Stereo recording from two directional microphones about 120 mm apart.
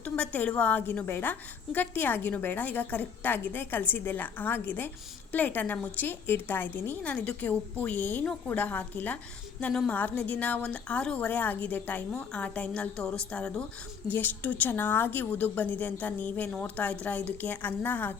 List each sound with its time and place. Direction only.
0.0 s a woman's voice: 15° left (ahead or behind)